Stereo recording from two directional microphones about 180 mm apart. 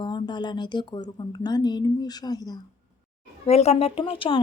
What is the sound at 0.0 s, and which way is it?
Speech, 25° left (ahead or behind).